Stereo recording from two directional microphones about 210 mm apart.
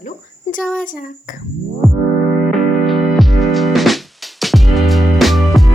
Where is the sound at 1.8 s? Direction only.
Centre (ahead or behind).